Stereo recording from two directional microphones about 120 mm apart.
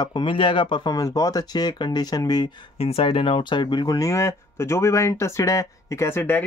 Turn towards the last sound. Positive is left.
turn(degrees=20)  # may be behind; listen again after turning